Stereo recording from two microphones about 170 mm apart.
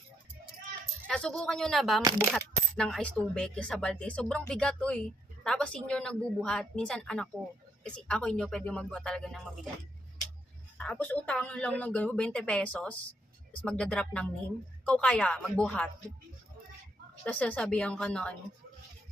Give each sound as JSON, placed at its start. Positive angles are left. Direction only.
{"t": 1.0, "sound": "coin", "side_deg": 5}
{"t": 10.8, "sound": "speech", "side_deg": 10}
{"t": 13.6, "sound": "coin", "side_deg": 5}
{"t": 14.8, "sound": "speech", "side_deg": 5}
{"t": 17.2, "sound": "coin", "side_deg": 5}